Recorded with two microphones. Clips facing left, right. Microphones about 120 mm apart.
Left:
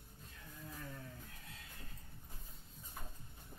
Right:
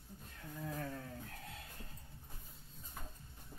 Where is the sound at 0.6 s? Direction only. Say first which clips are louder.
Right 7 dB; 60° right (ahead or behind).